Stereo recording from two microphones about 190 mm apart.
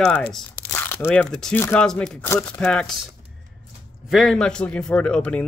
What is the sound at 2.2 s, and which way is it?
Speech, 15° left (ahead or behind).